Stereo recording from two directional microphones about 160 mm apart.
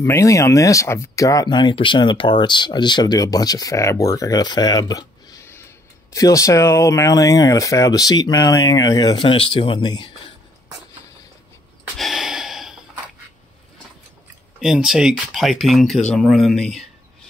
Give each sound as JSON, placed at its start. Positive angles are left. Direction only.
{"t": 0.0, "sound": "speech", "side_deg": 20}
{"t": 12.0, "sound": "gasp", "side_deg": 0}
{"t": 14.6, "sound": "speech", "side_deg": 0}